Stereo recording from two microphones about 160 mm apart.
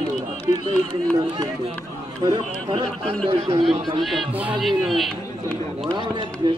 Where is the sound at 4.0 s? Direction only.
Centre (ahead or behind).